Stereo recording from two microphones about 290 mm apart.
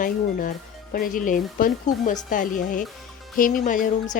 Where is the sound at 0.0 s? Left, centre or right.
Left.